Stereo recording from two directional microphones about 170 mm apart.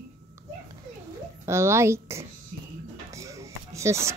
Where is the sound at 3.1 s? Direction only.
20° right (ahead or behind).